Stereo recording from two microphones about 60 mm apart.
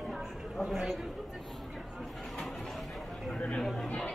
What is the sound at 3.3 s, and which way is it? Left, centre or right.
Chatter, centre.